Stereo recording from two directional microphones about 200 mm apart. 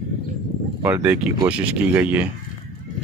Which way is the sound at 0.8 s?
10° right (ahead or behind).